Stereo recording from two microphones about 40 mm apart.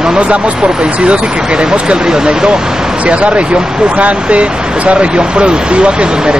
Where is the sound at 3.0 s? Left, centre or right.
Right.